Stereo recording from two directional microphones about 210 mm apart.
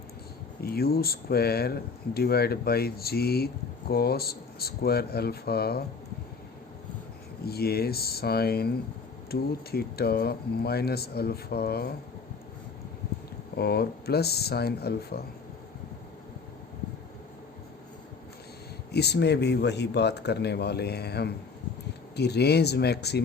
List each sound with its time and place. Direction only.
0.6 s speech: 45° left (ahead or behind)
7.4 s speech: 50° left (ahead or behind)
13.6 s speech: 50° left (ahead or behind)
18.9 s speech: 50° left (ahead or behind)